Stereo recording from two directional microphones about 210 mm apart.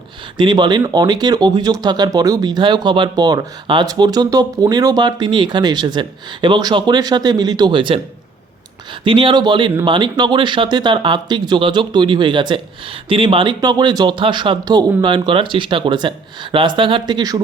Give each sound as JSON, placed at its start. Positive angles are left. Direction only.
{"t": 0.3, "sound": "speech", "side_deg": -20}
{"t": 9.0, "sound": "speech", "side_deg": -25}